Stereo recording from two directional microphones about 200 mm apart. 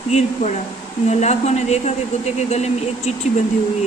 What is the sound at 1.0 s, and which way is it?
Speech, 35° left (ahead or behind).